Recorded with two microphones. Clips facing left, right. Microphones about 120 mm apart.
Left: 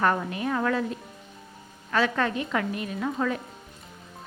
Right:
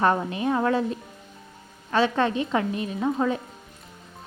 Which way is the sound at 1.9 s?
25° right (ahead or behind).